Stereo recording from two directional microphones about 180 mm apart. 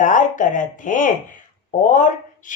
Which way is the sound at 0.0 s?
45° left (ahead or behind).